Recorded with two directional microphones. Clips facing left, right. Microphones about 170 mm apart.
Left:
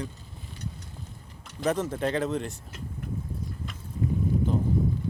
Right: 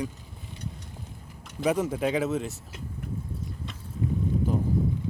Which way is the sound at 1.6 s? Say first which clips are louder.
Right 2 dB; 10° right (ahead or behind).